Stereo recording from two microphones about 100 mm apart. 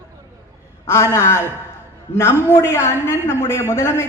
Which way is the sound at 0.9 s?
25° left (ahead or behind).